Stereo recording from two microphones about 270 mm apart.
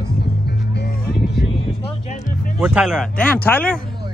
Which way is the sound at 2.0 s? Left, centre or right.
Left.